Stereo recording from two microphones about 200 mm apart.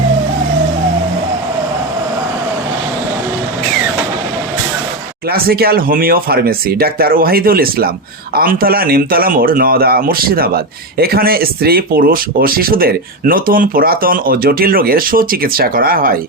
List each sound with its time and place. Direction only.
5.3 s speech: 50° right (ahead or behind)